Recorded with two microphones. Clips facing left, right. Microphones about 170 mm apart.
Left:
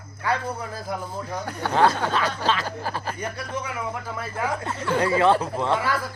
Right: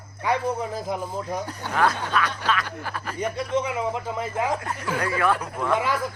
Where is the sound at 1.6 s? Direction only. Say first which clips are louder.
Left 5 dB; 80° left.